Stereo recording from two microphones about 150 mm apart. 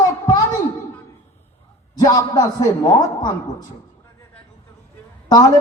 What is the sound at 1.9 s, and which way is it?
A man's voice, 25° left (ahead or behind).